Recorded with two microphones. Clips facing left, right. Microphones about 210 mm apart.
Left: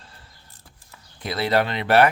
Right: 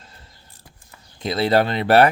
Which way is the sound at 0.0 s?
20° right (ahead or behind).